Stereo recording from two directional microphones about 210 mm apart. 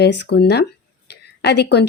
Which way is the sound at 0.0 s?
55° left (ahead or behind).